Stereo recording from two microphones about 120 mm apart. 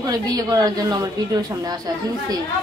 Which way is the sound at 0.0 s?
30° right (ahead or behind).